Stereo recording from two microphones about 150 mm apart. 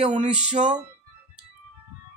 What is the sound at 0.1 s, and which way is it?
Speech, 50° right (ahead or behind).